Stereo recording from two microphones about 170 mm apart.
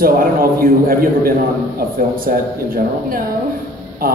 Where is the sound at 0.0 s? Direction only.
60° right (ahead or behind).